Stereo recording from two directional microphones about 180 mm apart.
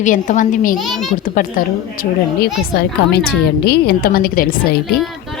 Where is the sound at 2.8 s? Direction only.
65° left (ahead or behind).